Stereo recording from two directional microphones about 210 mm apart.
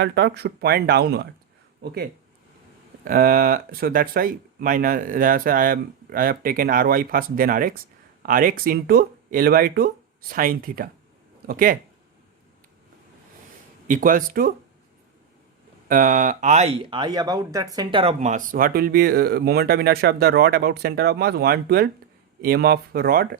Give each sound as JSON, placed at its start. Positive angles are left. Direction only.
{"t": 0.0, "sound": "speech", "side_deg": -50}
{"t": 13.8, "sound": "speech", "side_deg": -40}
{"t": 15.9, "sound": "speech", "side_deg": -40}